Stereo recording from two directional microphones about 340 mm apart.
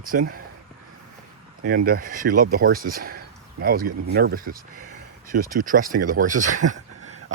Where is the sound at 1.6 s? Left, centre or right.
Right.